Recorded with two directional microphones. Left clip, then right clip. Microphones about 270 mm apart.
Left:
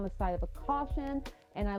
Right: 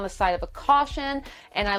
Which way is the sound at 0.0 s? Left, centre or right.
Centre.